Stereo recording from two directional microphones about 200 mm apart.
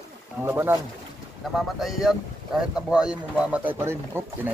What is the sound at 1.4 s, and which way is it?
Speech, centre (ahead or behind).